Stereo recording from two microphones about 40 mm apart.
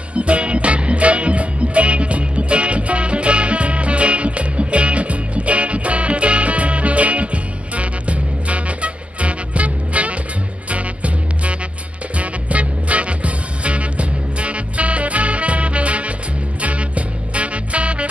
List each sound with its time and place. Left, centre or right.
0.1 s music: right